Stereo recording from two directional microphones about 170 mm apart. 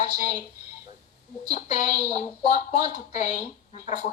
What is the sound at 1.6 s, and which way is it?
A woman's voice, 45° left (ahead or behind).